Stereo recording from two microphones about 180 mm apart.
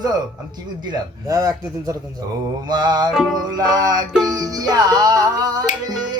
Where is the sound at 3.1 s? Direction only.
Centre (ahead or behind).